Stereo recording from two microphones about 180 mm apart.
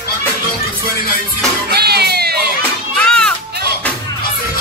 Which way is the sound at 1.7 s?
65° right (ahead or behind).